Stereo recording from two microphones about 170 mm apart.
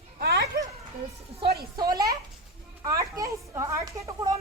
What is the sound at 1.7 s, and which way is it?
A woman's voice, 25° right (ahead or behind).